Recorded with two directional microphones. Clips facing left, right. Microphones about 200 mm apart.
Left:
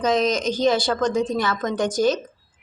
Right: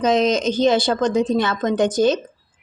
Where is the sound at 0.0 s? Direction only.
20° right (ahead or behind).